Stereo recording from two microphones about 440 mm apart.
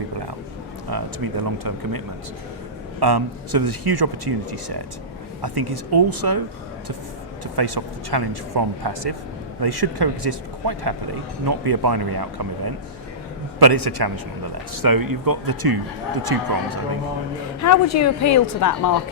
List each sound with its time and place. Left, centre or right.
0.9 s speech: right
3.0 s speech: right
5.4 s speech: right
7.5 s speech: right
11.4 s speech: right
13.6 s speech: right
17.6 s a woman's voice: left